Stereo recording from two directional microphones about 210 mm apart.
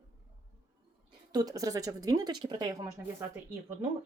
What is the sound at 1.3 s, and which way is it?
Speech, 15° right (ahead or behind).